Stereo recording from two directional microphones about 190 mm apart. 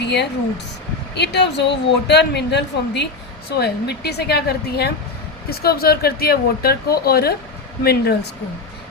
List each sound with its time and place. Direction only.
0.0 s a woman's voice: 65° left (ahead or behind)